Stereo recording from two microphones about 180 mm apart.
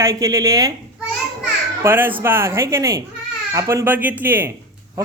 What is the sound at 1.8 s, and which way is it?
Speech, 10° right (ahead or behind).